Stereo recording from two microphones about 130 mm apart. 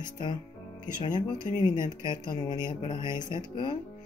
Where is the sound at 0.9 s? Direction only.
85° left.